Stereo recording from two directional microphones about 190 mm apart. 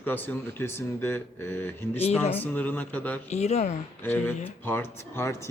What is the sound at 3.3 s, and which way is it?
Speech, 35° left (ahead or behind).